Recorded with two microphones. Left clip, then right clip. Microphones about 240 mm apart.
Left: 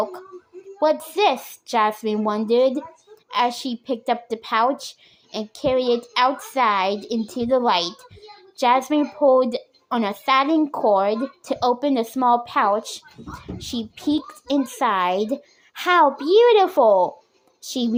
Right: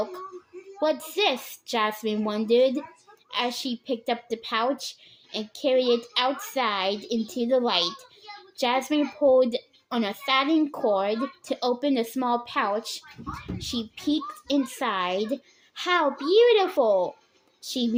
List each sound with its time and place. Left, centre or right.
0.8 s a woman's voice: centre